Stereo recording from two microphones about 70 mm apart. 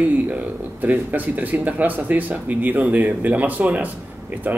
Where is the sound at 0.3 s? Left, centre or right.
Right.